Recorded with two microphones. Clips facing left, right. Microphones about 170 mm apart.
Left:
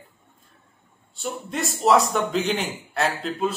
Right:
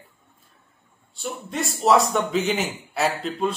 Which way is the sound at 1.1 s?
Centre (ahead or behind).